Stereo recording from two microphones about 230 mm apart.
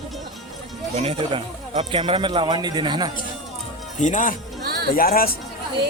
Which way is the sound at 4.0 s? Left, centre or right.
Left.